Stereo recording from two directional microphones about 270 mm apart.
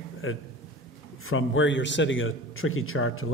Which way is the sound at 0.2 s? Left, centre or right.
Left.